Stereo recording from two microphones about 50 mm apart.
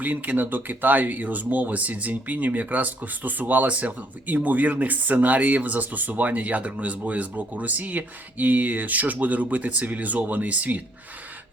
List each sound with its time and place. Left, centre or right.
0.0 s speech: right